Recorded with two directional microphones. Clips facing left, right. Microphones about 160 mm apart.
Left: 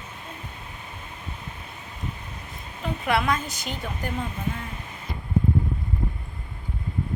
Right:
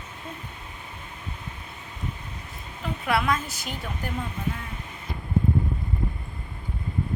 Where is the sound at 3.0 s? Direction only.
Centre (ahead or behind).